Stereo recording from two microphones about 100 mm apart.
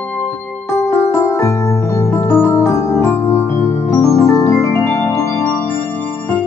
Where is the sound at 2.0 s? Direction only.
25° left (ahead or behind).